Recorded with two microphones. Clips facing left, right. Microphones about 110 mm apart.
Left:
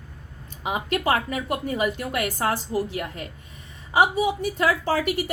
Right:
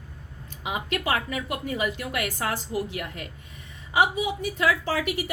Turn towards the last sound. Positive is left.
turn(degrees=40)  # may be behind; listen again after turning